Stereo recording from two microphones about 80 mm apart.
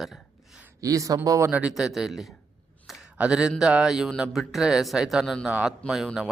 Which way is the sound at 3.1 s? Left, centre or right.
Centre.